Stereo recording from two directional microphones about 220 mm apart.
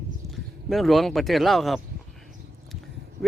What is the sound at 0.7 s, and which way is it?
Speech, centre (ahead or behind).